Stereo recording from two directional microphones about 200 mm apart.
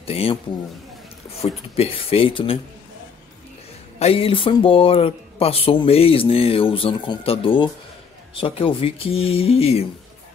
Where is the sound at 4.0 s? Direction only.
30° left (ahead or behind).